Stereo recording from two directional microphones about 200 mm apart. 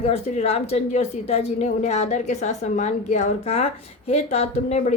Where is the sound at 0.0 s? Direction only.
35° left (ahead or behind).